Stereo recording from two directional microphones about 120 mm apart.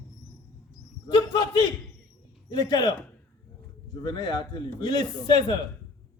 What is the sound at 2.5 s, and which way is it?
Speech, 35° left (ahead or behind).